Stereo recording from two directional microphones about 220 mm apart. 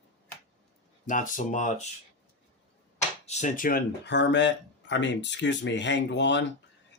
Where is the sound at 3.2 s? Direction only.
35° left (ahead or behind).